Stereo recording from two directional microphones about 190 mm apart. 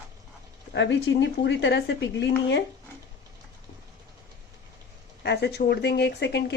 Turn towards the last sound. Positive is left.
turn(degrees=65)  # may be behind; listen again after turning